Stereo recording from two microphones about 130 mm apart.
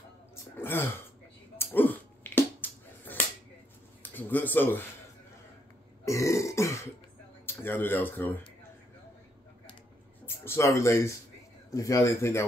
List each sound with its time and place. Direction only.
0.6 s speech: 15° left (ahead or behind)
1.6 s a sound: 15° left (ahead or behind)
4.0 s speech: 15° left (ahead or behind)
6.0 s a sound: 25° left (ahead or behind)
7.4 s speech: 15° left (ahead or behind)
10.2 s speech: 20° left (ahead or behind)